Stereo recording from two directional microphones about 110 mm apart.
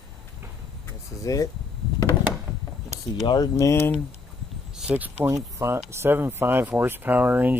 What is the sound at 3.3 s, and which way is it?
Speech, 30° left (ahead or behind).